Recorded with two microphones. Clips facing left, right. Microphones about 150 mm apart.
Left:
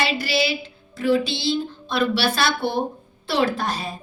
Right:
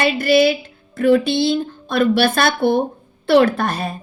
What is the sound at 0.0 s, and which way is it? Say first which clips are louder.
A woman's voice: right 8 dB; 50° right (ahead or behind).